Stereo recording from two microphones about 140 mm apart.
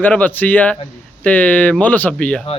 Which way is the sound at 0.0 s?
10° left (ahead or behind).